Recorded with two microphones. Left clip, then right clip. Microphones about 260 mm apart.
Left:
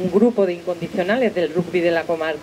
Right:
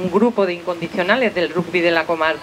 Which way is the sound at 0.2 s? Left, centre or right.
Centre.